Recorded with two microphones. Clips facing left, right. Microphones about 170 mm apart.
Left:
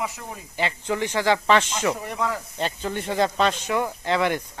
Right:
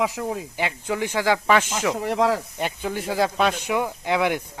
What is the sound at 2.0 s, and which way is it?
Speech, 90° right.